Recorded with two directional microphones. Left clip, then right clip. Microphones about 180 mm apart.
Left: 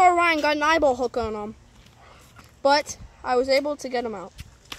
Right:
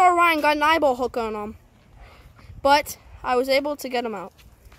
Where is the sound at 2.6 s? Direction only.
15° right (ahead or behind).